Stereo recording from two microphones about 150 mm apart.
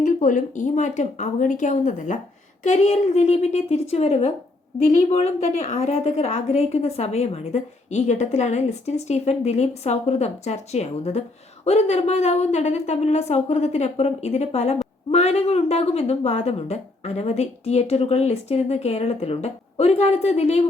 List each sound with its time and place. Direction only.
0.0 s a woman's voice: 60° left (ahead or behind)